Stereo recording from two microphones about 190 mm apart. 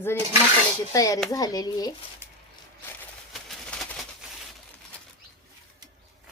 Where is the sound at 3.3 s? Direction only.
5° left (ahead or behind).